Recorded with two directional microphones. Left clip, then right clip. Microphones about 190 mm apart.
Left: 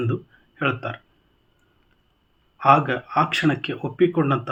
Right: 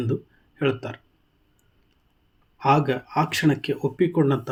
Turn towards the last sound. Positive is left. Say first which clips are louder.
# left 2 dB
turn(degrees=-40)  # may be behind; listen again after turning